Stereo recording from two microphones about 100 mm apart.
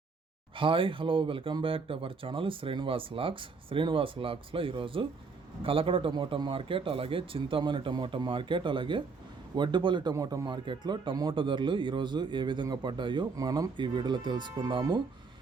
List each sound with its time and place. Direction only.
0.5 s speech: 60° right (ahead or behind)
6.1 s a man's voice: 45° right (ahead or behind)
6.5 s a man's voice: 65° right (ahead or behind)
10.2 s a man's voice: 40° right (ahead or behind)
13.3 s speech: 40° right (ahead or behind)
13.7 s a man's voice: 50° right (ahead or behind)